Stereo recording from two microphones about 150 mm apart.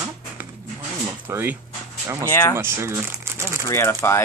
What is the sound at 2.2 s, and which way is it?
Speech, 15° left (ahead or behind).